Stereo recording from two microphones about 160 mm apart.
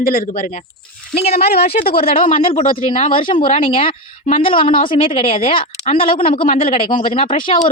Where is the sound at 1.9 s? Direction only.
70° left (ahead or behind).